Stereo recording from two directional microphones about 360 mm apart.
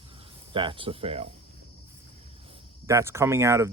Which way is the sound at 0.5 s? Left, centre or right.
Centre.